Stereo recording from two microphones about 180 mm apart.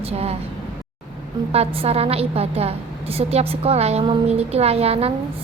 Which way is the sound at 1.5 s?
35° right (ahead or behind).